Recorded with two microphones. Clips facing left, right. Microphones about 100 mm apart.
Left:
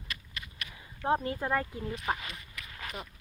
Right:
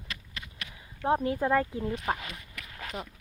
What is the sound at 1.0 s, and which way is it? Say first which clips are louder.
Speech: right 3 dB; 5° right (ahead or behind).